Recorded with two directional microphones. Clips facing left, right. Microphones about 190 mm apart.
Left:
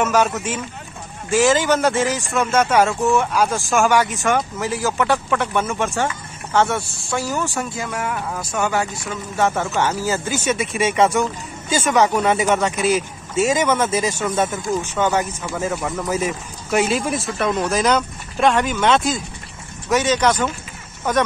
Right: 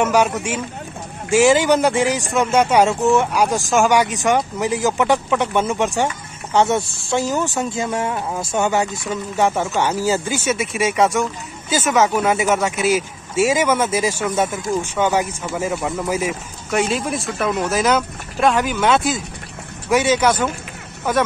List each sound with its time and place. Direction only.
0.0 s speech: 10° right (ahead or behind)
16.7 s speech: 5° left (ahead or behind)